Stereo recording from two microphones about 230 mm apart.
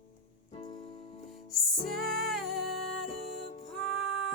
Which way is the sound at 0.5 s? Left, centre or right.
Left.